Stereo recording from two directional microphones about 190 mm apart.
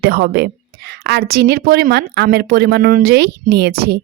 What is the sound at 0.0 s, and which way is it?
A woman's voice, 55° right (ahead or behind).